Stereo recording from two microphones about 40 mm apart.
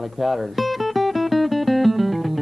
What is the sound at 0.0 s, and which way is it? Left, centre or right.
Music, centre.